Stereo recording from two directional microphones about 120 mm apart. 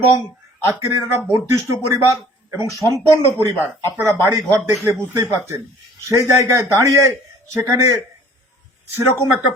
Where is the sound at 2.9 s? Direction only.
25° right (ahead or behind).